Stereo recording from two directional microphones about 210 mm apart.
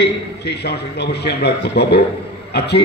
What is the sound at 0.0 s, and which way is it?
A man's voice, 55° left (ahead or behind).